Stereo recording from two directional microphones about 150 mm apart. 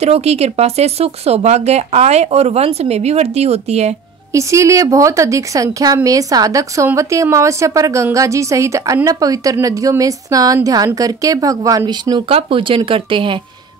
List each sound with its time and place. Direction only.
0.0 s speech: 45° right (ahead or behind)
4.3 s a woman's voice: 20° right (ahead or behind)
12.3 s speech: 40° right (ahead or behind)